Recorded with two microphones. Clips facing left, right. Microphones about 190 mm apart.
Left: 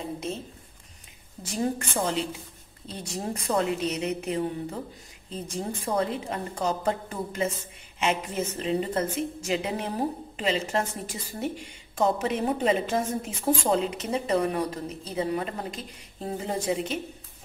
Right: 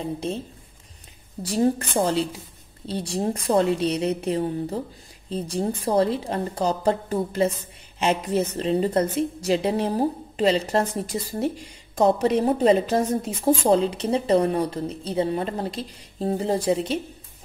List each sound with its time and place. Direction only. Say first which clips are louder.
1.4 s a woman's voice: right 7 dB; 35° right (ahead or behind)